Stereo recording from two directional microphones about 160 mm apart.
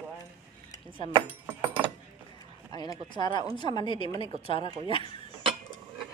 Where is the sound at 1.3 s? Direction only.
10° right (ahead or behind).